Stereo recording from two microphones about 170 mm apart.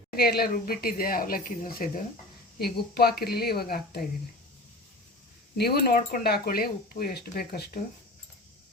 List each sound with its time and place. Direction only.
0.2 s speech: 65° left (ahead or behind)
5.5 s speech: 70° left (ahead or behind)